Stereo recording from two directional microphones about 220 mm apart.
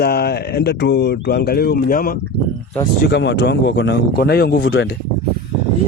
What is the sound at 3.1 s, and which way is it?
Speech, 50° left (ahead or behind).